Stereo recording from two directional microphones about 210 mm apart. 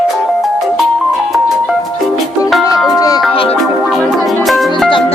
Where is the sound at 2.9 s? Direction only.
15° left (ahead or behind).